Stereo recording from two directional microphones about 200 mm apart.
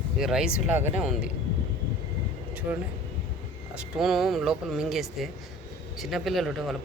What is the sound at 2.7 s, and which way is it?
Speech, 10° right (ahead or behind).